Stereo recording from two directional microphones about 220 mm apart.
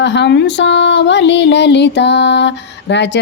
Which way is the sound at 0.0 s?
55° left (ahead or behind).